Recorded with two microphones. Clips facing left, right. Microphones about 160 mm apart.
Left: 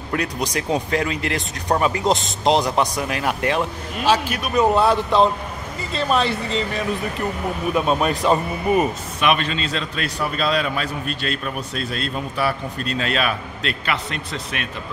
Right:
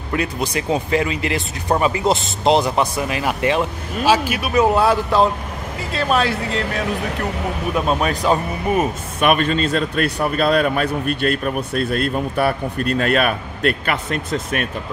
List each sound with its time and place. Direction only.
0.1 s speech: 5° right (ahead or behind)
9.2 s a man's voice: 50° right (ahead or behind)